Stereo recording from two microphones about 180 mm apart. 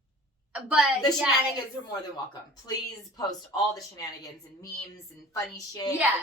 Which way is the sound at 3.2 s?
20° left (ahead or behind).